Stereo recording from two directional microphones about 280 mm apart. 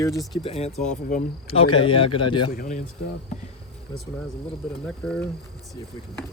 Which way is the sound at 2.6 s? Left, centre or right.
Left.